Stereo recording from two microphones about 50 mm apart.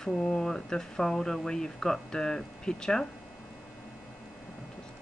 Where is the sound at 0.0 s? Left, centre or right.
Centre.